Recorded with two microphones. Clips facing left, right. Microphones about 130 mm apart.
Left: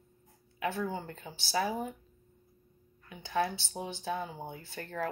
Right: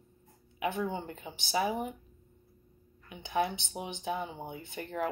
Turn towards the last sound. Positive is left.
turn(degrees=-20)  # may be behind; listen again after turning